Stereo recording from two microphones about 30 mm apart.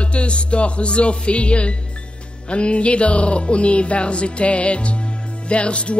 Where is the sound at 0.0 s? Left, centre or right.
Left.